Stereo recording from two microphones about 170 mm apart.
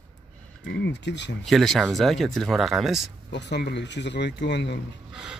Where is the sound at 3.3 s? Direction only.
85° left.